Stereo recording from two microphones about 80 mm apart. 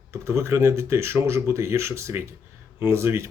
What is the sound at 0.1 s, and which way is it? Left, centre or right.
Speech, right.